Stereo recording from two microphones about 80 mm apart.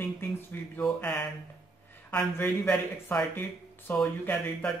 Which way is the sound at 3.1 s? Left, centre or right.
Centre.